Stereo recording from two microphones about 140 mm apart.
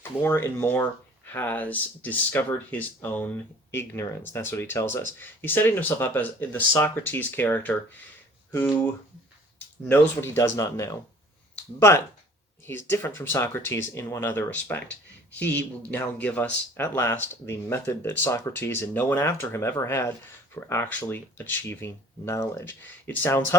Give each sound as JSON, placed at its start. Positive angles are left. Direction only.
{"t": 0.2, "sound": "speech", "side_deg": 15}
{"t": 9.9, "sound": "speech", "side_deg": 15}